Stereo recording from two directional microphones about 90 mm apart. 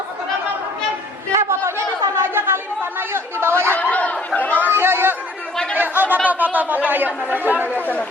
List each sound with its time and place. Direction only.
1.3 s a sound: 30° right (ahead or behind)
2.1 s chatter: 25° right (ahead or behind)
3.7 s chatter: 15° left (ahead or behind)
4.6 s chatter: 25° right (ahead or behind)
6.2 s speech: 20° right (ahead or behind)